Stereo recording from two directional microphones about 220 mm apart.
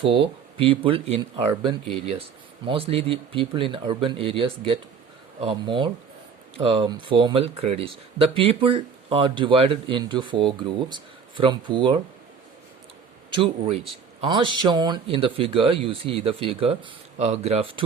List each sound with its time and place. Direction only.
0.0 s speech: 25° right (ahead or behind)
13.3 s speech: 25° right (ahead or behind)